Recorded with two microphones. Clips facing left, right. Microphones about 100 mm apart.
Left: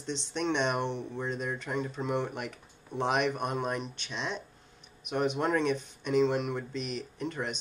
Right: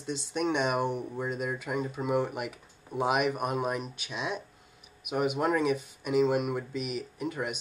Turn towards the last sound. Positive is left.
turn(degrees=-10)  # may be behind; listen again after turning